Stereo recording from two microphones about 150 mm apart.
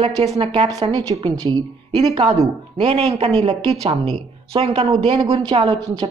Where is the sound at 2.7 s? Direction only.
40° right (ahead or behind).